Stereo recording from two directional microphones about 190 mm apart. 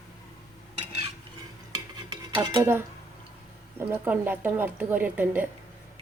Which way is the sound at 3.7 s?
10° right (ahead or behind).